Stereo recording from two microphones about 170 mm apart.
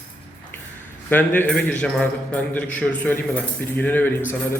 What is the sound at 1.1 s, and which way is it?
A man's voice, 10° left (ahead or behind).